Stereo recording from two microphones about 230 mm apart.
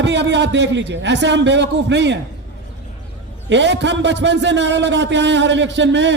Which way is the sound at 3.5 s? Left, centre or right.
Right.